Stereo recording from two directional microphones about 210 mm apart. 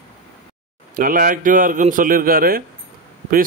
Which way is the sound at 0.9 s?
40° right (ahead or behind).